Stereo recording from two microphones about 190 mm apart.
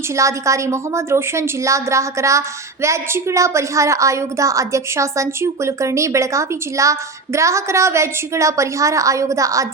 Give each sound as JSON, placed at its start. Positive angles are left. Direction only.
{"t": 0.2, "sound": "a woman's voice", "side_deg": -15}